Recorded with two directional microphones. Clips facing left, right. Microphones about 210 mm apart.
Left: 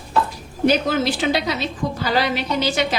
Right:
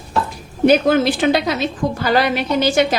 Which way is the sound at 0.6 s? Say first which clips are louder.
Right 5 dB; 50° right (ahead or behind).